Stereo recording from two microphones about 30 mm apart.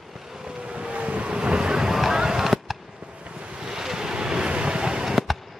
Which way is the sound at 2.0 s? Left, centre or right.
Centre.